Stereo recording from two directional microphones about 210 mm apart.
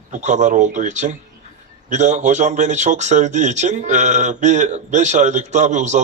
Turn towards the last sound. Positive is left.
turn(degrees=-35)  # may be behind; listen again after turning